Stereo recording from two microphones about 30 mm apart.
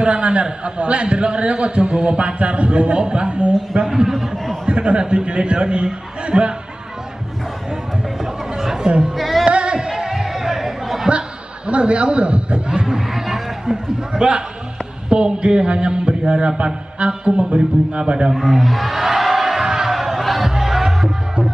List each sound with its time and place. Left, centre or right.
0.0 s music: right
4.0 s a man's voice: centre
4.6 s music: right
8.5 s chatter: centre
9.1 s music: centre
9.4 s music: right
9.8 s music: centre
10.1 s chatter: centre
11.1 s chuckle: right
12.9 s a sound: centre
14.1 s music: right
18.3 s a sound: centre
20.2 s music: centre